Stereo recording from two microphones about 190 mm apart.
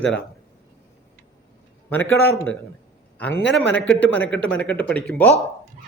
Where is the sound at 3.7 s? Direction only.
5° left (ahead or behind).